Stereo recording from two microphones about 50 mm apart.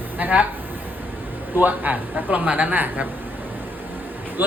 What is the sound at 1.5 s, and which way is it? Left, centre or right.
Speech, right.